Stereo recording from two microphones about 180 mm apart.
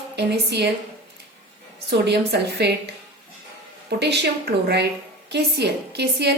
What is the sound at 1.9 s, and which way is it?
Speech, 70° right (ahead or behind).